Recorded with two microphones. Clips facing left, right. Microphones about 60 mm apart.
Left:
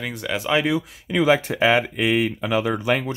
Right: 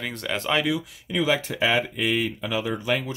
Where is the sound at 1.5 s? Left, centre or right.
Left.